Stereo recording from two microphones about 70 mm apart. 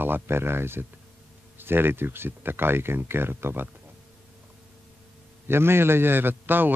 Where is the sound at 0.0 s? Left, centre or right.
Right.